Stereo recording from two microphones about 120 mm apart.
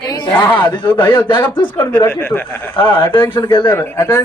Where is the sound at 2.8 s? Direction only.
45° left (ahead or behind).